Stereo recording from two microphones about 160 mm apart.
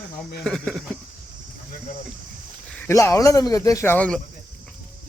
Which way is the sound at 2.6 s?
10° left (ahead or behind).